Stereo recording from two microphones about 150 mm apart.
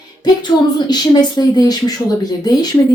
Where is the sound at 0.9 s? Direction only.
25° left (ahead or behind).